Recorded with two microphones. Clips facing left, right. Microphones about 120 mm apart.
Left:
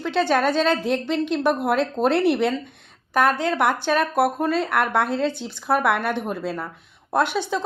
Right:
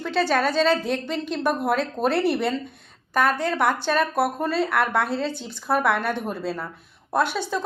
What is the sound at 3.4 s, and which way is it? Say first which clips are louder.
Speech: left 1 dB; 10° left (ahead or behind).